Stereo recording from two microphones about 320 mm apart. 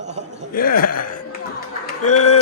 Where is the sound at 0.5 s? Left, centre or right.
Left.